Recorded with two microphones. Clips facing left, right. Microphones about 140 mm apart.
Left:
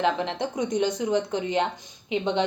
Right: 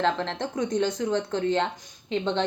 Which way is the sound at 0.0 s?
15° left (ahead or behind).